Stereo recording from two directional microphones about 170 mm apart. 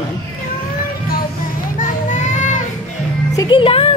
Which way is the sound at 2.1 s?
45° left (ahead or behind).